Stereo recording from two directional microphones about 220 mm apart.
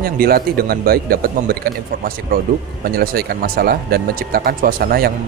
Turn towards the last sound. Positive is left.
turn(degrees=-45)  # may be behind; listen again after turning